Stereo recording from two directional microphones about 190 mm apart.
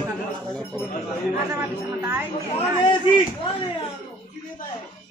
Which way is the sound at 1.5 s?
10° right (ahead or behind).